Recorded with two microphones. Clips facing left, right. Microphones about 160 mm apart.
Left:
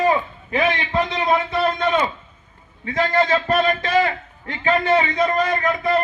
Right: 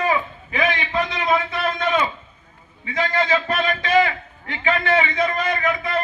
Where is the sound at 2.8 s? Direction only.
45° left (ahead or behind).